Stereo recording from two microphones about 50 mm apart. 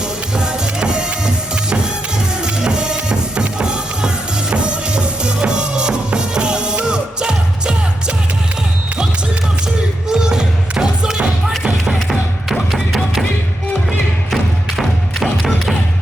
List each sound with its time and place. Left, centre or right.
0.3 s music: centre
2.4 s music: centre
10.1 s music: centre
12.7 s music: centre
14.8 s music: centre